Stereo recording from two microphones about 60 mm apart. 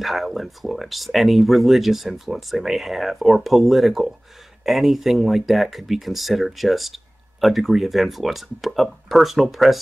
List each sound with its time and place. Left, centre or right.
0.0 s speech: centre